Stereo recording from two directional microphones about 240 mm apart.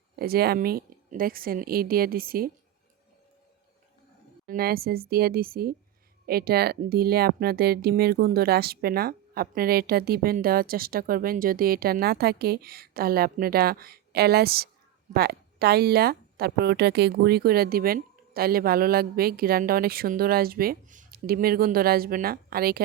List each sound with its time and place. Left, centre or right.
0.2 s speech: right
4.4 s speech: right